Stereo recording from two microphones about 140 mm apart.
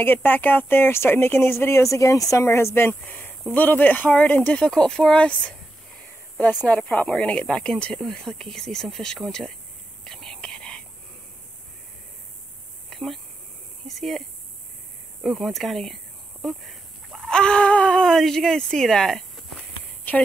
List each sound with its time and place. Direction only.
0.0 s speech: 15° left (ahead or behind)
6.7 s speech: 10° left (ahead or behind)
10.0 s whispering: centre (ahead or behind)
12.9 s speech: centre (ahead or behind)
15.2 s speech: centre (ahead or behind)
20.1 s a woman's voice: 15° left (ahead or behind)